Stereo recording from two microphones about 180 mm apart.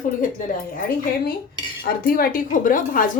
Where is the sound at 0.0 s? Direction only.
45° left (ahead or behind).